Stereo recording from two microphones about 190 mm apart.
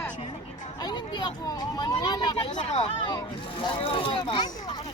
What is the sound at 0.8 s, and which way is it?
Speech, 20° left (ahead or behind).